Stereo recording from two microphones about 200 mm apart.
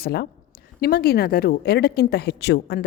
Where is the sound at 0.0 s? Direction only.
50° left (ahead or behind).